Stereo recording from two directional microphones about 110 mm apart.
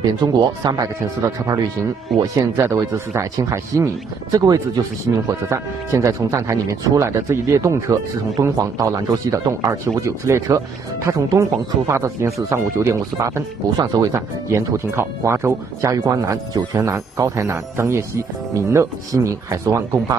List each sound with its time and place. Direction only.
0.2 s speech: 40° right (ahead or behind)
5.5 s speech: 25° right (ahead or behind)